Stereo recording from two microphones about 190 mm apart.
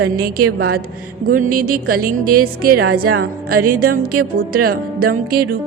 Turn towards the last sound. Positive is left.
turn(degrees=-50)  # may be behind; listen again after turning